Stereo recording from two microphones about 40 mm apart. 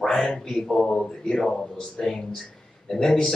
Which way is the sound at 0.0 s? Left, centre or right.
Centre.